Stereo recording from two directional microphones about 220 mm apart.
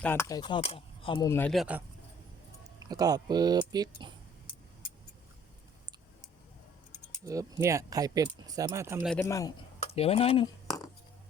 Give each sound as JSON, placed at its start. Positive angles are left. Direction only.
{"t": 0.0, "sound": "speech", "side_deg": 10}
{"t": 1.3, "sound": "a man's voice", "side_deg": 5}
{"t": 2.9, "sound": "speech", "side_deg": -15}
{"t": 7.2, "sound": "speech", "side_deg": -15}
{"t": 9.0, "sound": "a man's voice", "side_deg": 10}
{"t": 9.8, "sound": "speech", "side_deg": 25}